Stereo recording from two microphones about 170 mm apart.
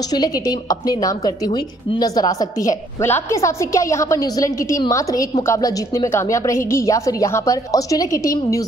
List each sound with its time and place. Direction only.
0.1 s a woman's voice: 25° left (ahead or behind)